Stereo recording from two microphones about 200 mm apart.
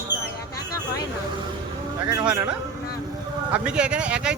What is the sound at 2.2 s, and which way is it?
Speech, 5° right (ahead or behind).